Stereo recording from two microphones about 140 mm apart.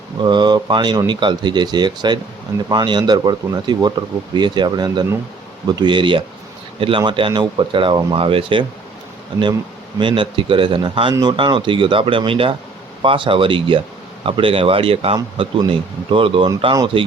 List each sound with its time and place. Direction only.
0.2 s speech: 35° right (ahead or behind)
10.0 s speech: 35° right (ahead or behind)